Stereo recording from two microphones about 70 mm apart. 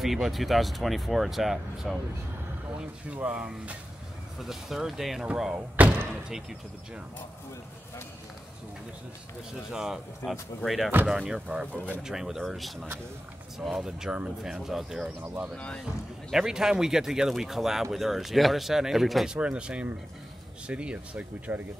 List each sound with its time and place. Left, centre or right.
0.0 s speech: centre
3.1 s speech: centre
4.4 s speech: centre
9.7 s speech: centre
11.1 s speech: centre
12.0 s speech: centre
15.5 s speech: centre
15.8 s speech: centre
19.3 s speech: centre